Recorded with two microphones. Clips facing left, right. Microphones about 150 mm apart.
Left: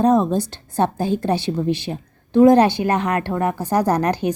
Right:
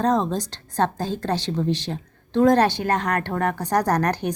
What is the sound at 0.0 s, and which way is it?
A woman's voice, 10° left (ahead or behind).